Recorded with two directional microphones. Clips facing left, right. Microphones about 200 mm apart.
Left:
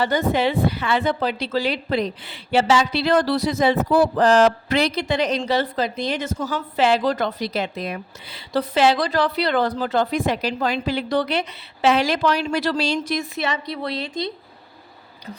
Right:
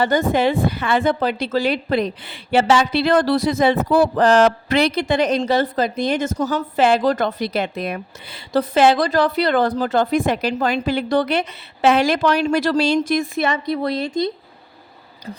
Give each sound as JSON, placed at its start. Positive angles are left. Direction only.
{"t": 0.0, "sound": "speech", "side_deg": -50}